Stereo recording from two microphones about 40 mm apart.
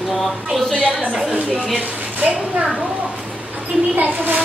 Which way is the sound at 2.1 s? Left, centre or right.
Right.